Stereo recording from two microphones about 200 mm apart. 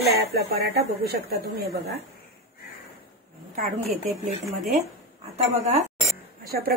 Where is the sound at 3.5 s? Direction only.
35° right (ahead or behind).